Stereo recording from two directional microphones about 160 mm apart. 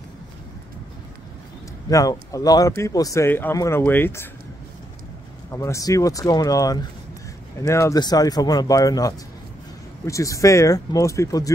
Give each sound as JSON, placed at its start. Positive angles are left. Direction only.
{"t": 1.9, "sound": "speech", "side_deg": 20}
{"t": 5.5, "sound": "speech", "side_deg": 20}